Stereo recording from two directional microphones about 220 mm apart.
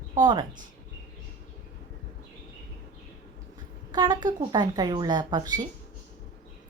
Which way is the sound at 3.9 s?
20° right (ahead or behind).